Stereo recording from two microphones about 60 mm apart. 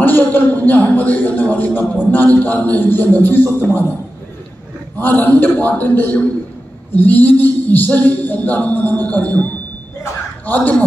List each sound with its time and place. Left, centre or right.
0.2 s a man's voice: left
4.9 s a man's voice: left